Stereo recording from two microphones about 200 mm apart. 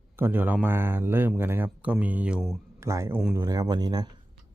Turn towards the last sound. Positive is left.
turn(degrees=-20)  # may be behind; listen again after turning